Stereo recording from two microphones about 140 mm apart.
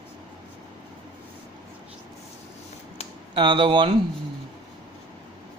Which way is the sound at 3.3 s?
35° right (ahead or behind).